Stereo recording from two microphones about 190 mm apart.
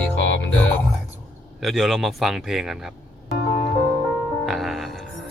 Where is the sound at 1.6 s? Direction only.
Centre (ahead or behind).